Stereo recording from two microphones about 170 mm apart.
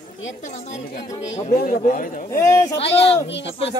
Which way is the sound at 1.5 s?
50° left (ahead or behind).